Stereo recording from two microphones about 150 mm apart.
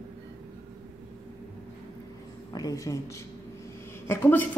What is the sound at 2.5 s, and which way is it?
A man's voice, 25° left (ahead or behind).